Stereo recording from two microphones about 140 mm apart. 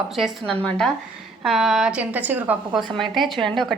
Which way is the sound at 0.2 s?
5° left (ahead or behind).